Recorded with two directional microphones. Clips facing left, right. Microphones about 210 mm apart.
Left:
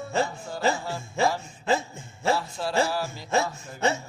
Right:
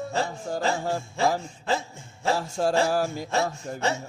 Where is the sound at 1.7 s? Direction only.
20° left (ahead or behind).